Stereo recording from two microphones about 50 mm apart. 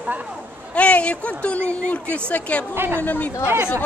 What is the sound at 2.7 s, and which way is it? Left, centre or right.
Speech, right.